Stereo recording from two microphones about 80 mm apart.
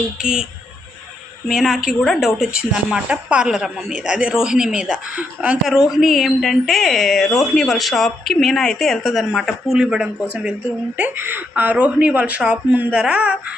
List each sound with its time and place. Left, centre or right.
0.2 s speech: centre
1.5 s a woman's voice: centre
2.5 s speech: centre
5.9 s a woman's voice: centre